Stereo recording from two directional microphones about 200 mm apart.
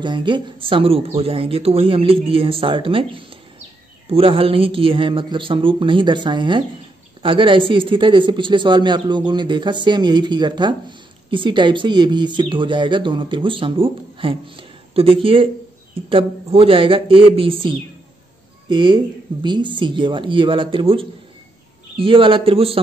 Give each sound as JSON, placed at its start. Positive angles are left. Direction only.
{"t": 0.0, "sound": "speech", "side_deg": -25}